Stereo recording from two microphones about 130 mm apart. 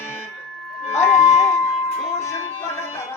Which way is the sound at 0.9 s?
20° left (ahead or behind).